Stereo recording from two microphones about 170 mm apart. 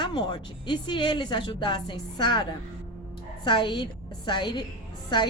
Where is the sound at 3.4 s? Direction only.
30° left (ahead or behind).